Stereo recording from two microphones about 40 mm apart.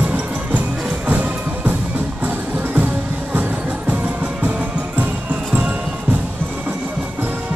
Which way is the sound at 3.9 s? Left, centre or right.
Right.